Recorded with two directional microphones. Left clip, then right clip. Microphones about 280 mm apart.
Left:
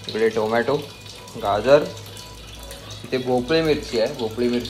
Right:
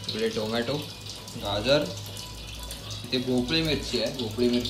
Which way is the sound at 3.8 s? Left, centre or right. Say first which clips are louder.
Left 7 dB; centre.